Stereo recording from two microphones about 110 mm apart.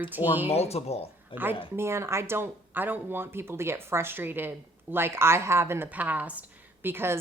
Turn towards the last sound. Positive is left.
turn(degrees=-20)  # may be behind; listen again after turning